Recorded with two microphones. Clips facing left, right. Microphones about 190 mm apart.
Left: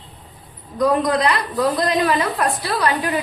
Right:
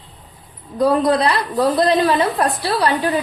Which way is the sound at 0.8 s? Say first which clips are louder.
Right 2 dB; 30° right (ahead or behind).